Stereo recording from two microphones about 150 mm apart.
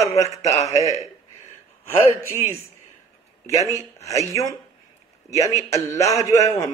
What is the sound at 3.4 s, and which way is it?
Speech, 20° left (ahead or behind).